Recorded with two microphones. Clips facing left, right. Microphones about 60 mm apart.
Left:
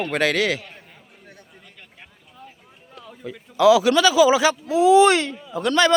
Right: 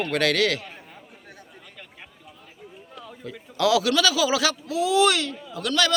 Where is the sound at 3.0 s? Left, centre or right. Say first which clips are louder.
Left 3 dB; centre.